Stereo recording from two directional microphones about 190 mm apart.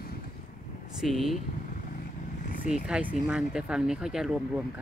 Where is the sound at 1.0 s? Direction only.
Centre (ahead or behind).